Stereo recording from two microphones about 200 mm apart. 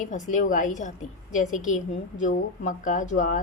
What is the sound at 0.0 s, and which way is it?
A woman's voice, 40° left (ahead or behind).